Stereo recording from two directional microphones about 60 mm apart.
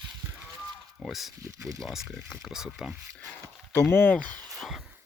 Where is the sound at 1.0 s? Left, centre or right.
Centre.